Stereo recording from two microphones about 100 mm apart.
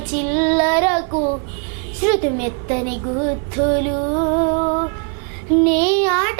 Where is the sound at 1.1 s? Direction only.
25° right (ahead or behind).